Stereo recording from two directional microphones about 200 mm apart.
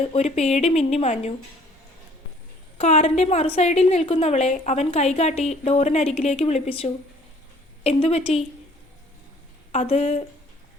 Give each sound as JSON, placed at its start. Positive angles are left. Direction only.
{"t": 0.1, "sound": "a woman's voice", "side_deg": 30}
{"t": 2.7, "sound": "a woman's voice", "side_deg": 35}
{"t": 9.7, "sound": "a woman's voice", "side_deg": 35}